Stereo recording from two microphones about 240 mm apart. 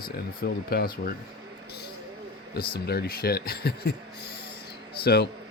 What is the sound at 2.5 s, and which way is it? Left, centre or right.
Speech, left.